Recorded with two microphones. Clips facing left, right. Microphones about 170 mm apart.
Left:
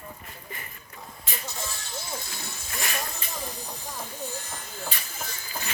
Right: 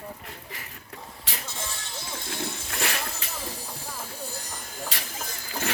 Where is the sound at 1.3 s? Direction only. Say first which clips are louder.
Left 1 dB; 80° right.